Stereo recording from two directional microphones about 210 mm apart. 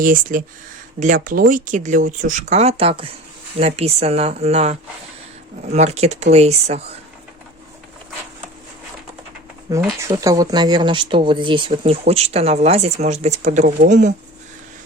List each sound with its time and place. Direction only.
0.0 s speech: 40° right (ahead or behind)
10.0 s speech: 15° right (ahead or behind); by 14.1 s 35° right (ahead or behind)